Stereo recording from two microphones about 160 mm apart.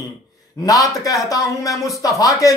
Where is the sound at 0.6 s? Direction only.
20° left (ahead or behind).